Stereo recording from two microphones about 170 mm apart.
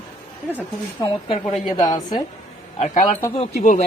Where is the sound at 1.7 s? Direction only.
25° left (ahead or behind).